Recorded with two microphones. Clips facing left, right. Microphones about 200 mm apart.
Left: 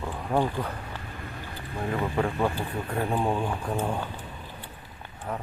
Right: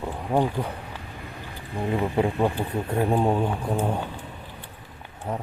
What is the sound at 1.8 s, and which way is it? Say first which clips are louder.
Speech: right 4 dB; 20° right (ahead or behind).